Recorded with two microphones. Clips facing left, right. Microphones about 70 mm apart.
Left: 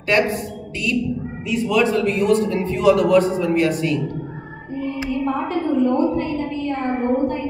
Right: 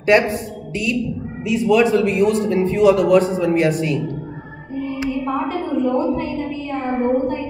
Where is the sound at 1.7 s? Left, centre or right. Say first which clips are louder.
Right 4 dB; right.